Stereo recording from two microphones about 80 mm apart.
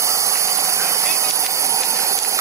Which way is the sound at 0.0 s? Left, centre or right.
Right.